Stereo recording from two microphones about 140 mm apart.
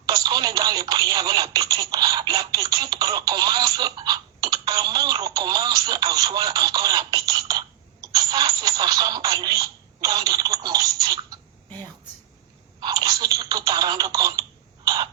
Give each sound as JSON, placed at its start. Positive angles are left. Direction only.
{"t": 0.0, "sound": "speech", "side_deg": -25}
{"t": 12.8, "sound": "speech", "side_deg": -25}
{"t": 14.8, "sound": "throat clearing", "side_deg": -30}